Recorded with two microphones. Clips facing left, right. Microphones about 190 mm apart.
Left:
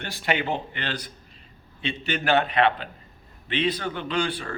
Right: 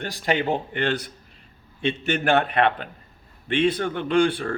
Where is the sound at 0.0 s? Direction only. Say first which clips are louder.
Right 3 dB; 40° right (ahead or behind).